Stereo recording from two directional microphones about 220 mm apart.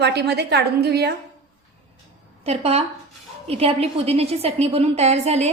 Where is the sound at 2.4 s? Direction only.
30° right (ahead or behind).